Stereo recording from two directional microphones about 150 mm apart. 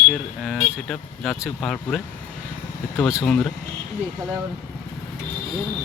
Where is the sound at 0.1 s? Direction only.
Centre (ahead or behind).